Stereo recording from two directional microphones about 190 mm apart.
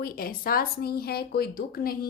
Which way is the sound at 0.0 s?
50° left (ahead or behind).